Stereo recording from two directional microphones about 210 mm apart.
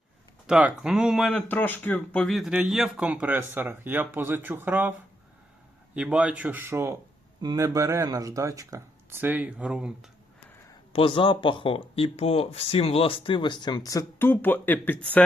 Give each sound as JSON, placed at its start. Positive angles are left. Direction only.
{"t": 0.4, "sound": "speech", "side_deg": -5}
{"t": 10.9, "sound": "speech", "side_deg": 25}